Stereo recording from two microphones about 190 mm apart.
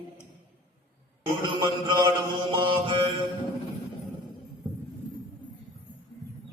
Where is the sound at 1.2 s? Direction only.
25° right (ahead or behind).